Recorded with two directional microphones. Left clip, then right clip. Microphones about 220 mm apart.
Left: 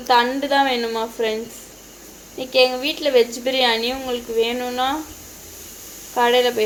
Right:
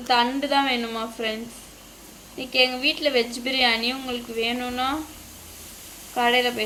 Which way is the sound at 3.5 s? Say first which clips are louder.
Left 2 dB; 15° right (ahead or behind).